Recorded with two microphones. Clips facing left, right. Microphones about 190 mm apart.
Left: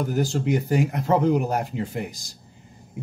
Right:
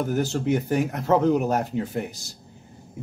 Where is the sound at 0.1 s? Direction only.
15° left (ahead or behind).